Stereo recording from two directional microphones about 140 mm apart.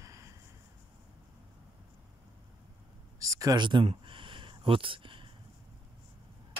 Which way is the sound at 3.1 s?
25° right (ahead or behind).